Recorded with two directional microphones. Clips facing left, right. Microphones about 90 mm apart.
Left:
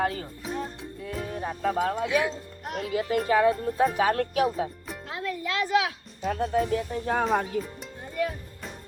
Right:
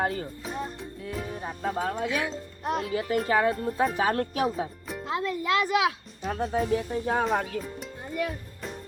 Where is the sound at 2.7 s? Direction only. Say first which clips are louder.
Right 2 dB; 30° right (ahead or behind).